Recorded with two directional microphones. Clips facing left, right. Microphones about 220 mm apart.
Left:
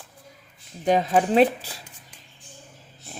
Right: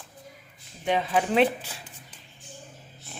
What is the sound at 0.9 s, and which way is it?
Speech, 40° left (ahead or behind).